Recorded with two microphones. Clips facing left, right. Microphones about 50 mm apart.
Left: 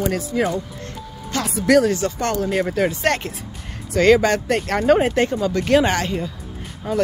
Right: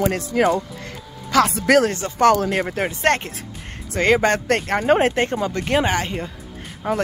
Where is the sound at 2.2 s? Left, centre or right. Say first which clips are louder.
Right 11 dB; right.